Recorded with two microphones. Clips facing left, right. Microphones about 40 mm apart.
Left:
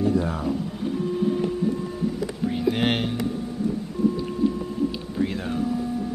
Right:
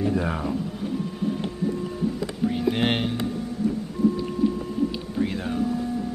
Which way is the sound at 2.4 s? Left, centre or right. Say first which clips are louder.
Even; centre.